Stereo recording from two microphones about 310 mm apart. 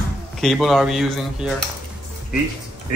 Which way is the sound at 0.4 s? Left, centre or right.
Centre.